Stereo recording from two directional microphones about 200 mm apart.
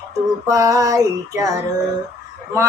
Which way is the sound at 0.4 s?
15° right (ahead or behind).